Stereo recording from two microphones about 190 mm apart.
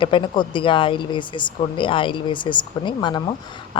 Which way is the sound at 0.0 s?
25° left (ahead or behind).